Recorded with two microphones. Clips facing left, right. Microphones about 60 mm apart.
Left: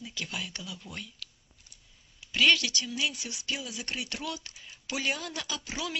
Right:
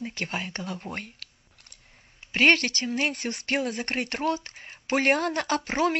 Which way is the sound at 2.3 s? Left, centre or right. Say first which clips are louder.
Right 4 dB; right.